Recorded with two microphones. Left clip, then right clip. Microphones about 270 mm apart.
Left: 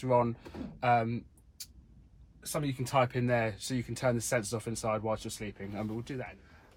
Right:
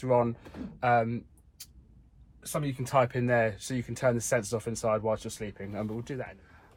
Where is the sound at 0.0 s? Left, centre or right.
Centre.